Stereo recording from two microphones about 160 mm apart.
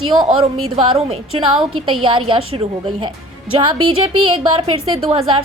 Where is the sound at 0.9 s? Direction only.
35° right (ahead or behind).